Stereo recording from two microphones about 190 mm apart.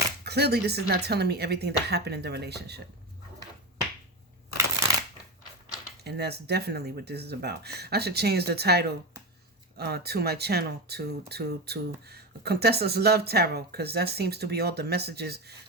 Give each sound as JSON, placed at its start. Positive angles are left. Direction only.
{"t": 0.3, "sound": "speech", "side_deg": -60}
{"t": 6.0, "sound": "speech", "side_deg": -60}